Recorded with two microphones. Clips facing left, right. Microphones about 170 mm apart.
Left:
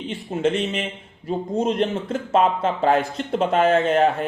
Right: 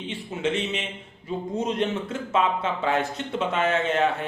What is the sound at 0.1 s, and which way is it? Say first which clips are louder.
Speech: left 5 dB; 45° left (ahead or behind).